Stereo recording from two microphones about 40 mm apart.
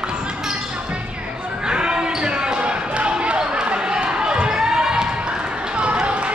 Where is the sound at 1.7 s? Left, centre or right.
Right.